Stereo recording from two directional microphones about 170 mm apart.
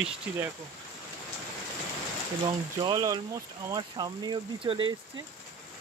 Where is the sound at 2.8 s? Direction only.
25° right (ahead or behind).